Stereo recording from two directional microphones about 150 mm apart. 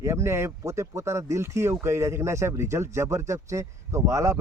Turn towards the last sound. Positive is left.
turn(degrees=-20)  # may be behind; listen again after turning